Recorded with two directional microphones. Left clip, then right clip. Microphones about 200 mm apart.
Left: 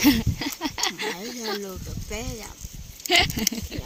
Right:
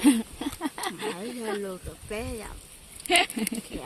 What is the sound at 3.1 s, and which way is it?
Speech, 10° left (ahead or behind).